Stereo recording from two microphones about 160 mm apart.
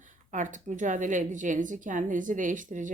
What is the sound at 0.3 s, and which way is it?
Speech, 55° right (ahead or behind).